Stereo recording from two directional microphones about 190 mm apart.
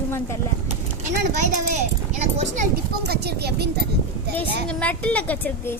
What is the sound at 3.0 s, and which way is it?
Speech, 60° right (ahead or behind).